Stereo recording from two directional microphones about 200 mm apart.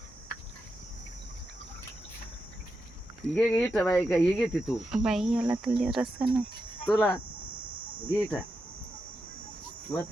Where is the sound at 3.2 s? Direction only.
5° left (ahead or behind).